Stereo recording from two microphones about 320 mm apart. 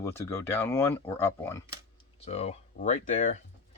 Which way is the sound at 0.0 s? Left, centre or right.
Centre.